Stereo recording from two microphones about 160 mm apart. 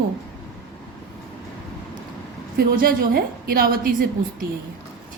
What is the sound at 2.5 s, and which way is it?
A woman's voice, 70° right (ahead or behind).